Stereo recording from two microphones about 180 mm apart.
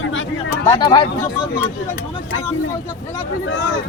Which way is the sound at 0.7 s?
25° left (ahead or behind).